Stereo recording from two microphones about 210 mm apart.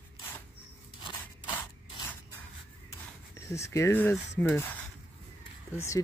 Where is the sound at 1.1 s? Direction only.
10° left (ahead or behind).